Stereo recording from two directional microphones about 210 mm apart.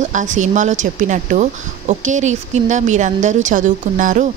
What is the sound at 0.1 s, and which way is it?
A woman's voice, 35° right (ahead or behind).